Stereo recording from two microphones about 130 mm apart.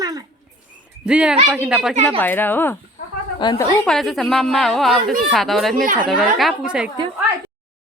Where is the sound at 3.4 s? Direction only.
35° left (ahead or behind).